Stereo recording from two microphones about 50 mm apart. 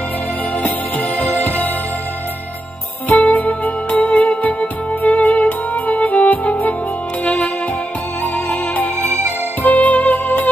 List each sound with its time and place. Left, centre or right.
0.6 s music: left
3.1 s music: left